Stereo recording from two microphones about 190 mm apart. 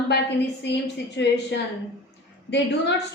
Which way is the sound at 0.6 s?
65° left (ahead or behind).